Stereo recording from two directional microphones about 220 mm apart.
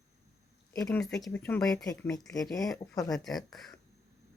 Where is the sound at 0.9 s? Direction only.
Centre (ahead or behind).